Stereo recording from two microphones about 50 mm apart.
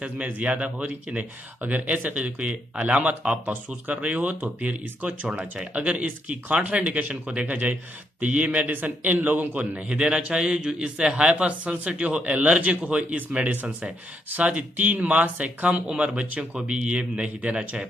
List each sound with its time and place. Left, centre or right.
0.0 s a man's voice: right